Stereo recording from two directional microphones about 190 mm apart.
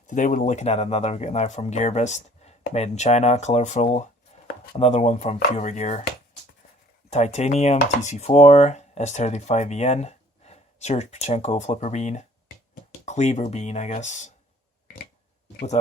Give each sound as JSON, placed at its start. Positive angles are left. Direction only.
{"t": 0.1, "sound": "speech", "side_deg": 40}
{"t": 4.3, "sound": "chopping", "side_deg": 35}
{"t": 4.7, "sound": "speech", "side_deg": 35}
{"t": 7.1, "sound": "speech", "side_deg": 35}